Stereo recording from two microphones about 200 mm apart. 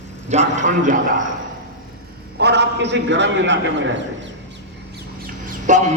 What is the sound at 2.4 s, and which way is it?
A man's voice, 60° right (ahead or behind).